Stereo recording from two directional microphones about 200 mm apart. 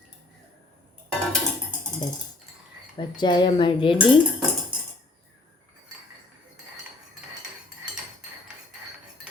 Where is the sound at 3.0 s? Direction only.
20° left (ahead or behind).